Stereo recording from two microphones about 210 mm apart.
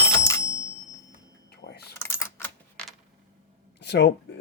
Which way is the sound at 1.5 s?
50° left (ahead or behind).